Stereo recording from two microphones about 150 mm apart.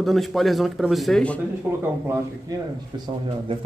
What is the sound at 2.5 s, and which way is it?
Speech, 25° right (ahead or behind).